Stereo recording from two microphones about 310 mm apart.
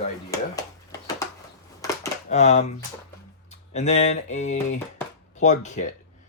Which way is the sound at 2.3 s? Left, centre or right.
Left.